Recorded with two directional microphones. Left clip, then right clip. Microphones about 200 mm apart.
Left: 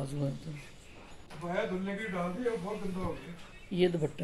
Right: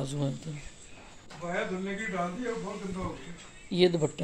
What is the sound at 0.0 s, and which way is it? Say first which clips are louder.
Speech: right 3 dB; 30° right (ahead or behind).